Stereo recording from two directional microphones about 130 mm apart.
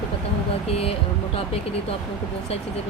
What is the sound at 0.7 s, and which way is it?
Speech, 50° left (ahead or behind).